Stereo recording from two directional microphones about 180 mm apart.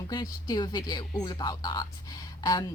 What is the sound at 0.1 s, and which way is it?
A woman's voice, 20° left (ahead or behind).